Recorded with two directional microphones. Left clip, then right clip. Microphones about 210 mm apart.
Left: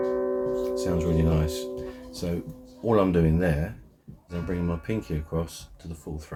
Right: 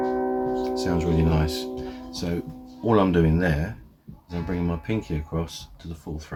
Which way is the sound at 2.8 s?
5° right (ahead or behind).